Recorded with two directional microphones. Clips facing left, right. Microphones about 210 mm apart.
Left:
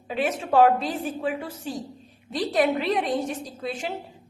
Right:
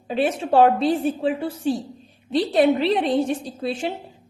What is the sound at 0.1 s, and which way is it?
A woman's voice, 30° right (ahead or behind).